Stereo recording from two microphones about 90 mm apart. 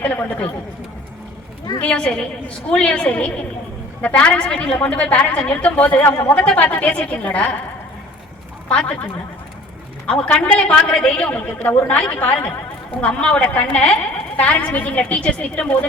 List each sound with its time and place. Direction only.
0.0 s a woman's voice: 15° left (ahead or behind)
1.8 s a woman's voice: 10° left (ahead or behind)
8.7 s a woman's voice: 10° left (ahead or behind)
10.1 s a woman's voice: 15° left (ahead or behind)